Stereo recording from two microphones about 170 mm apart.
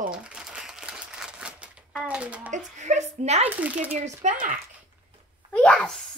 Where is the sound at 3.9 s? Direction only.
45° right (ahead or behind).